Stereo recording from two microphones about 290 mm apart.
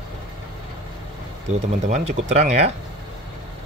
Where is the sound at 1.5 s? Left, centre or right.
Right.